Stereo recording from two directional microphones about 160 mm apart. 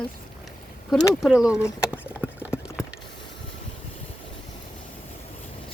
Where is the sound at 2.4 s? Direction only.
5° right (ahead or behind).